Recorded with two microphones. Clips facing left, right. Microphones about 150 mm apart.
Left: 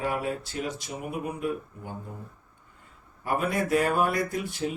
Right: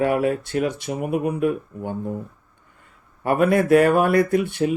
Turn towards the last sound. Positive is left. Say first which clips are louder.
# right 10 dB
turn(degrees=-65)  # may be behind; listen again after turning